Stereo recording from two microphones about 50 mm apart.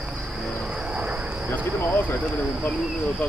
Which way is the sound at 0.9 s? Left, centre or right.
Right.